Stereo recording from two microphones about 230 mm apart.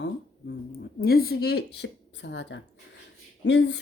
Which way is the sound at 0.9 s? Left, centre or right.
Left.